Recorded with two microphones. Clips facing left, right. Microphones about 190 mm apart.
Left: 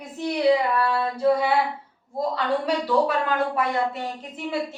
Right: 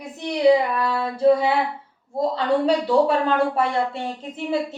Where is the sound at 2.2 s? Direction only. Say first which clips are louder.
Right 4 dB; 25° right (ahead or behind).